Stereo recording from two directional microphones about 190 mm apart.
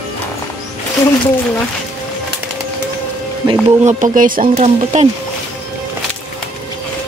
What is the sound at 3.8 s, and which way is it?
Speech, 40° right (ahead or behind).